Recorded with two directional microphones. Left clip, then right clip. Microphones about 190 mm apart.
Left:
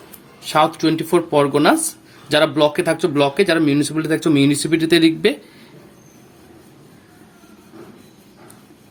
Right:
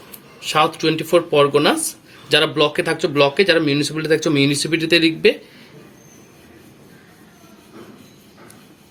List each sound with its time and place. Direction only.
0.4 s speech: 50° left (ahead or behind)